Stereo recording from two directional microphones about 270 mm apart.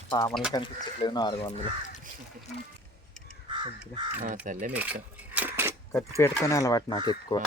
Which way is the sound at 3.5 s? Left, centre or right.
Centre.